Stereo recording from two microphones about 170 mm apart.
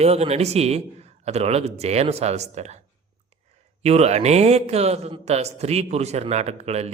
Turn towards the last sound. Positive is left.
turn(degrees=-40)  # may be behind; listen again after turning